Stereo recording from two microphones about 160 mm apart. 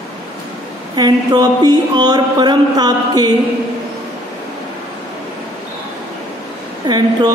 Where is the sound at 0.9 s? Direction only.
25° right (ahead or behind).